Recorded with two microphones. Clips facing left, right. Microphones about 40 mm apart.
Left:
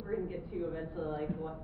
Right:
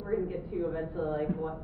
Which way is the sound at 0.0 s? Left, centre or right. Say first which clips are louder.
Right 5 dB; centre.